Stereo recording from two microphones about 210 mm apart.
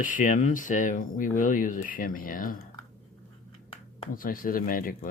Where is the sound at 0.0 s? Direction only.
40° left (ahead or behind).